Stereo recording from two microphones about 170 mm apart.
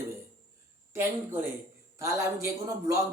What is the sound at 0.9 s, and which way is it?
A man's voice, 15° right (ahead or behind).